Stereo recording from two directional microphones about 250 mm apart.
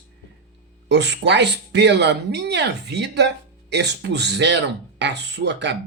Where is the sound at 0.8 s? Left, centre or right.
Right.